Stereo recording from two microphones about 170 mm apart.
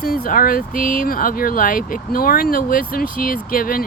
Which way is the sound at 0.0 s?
60° left (ahead or behind).